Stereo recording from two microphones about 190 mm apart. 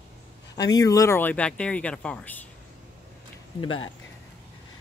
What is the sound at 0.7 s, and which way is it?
Speech, 20° left (ahead or behind).